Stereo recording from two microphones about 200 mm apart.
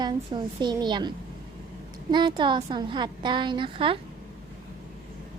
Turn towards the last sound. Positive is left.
turn(degrees=-25)  # may be behind; listen again after turning